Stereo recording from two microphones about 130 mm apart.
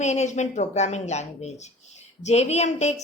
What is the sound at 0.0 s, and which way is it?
A woman's voice, 60° left (ahead or behind).